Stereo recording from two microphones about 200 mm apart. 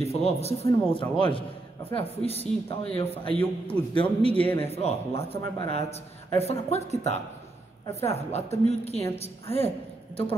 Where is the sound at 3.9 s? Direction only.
25° left (ahead or behind).